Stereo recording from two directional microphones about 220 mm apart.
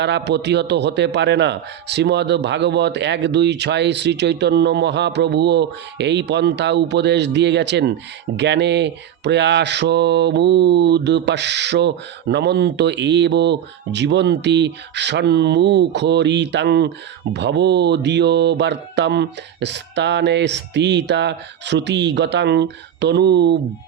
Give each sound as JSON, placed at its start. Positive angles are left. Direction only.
{"t": 0.0, "sound": "speech", "side_deg": -50}